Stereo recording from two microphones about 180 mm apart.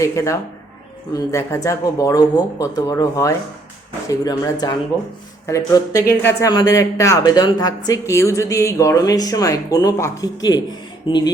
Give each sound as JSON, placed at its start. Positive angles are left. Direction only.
{"t": 0.0, "sound": "speech", "side_deg": 15}